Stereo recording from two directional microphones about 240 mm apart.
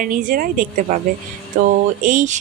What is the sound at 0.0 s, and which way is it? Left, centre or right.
Speech, right.